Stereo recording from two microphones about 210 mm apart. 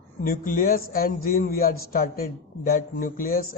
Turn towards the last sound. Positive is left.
turn(degrees=45)  # may be behind; listen again after turning